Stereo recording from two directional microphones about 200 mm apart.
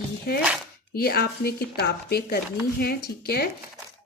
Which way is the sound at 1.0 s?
50° left (ahead or behind).